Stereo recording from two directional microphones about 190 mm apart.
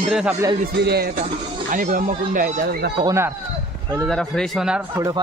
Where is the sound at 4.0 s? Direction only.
Centre (ahead or behind).